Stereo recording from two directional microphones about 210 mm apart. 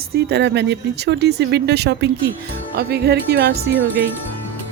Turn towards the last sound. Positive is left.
turn(degrees=-50)  # may be behind; listen again after turning